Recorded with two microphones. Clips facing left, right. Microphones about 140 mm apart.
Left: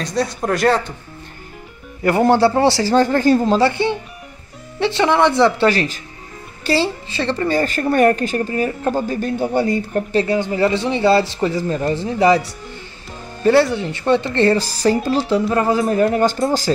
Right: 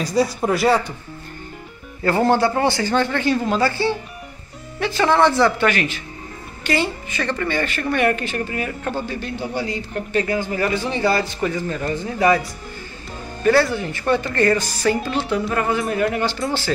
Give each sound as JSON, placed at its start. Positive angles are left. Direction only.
{"t": 0.0, "sound": "speech", "side_deg": -5}
{"t": 2.0, "sound": "a man's voice", "side_deg": 20}
{"t": 10.1, "sound": "a man's voice", "side_deg": 25}
{"t": 13.4, "sound": "a man's voice", "side_deg": 25}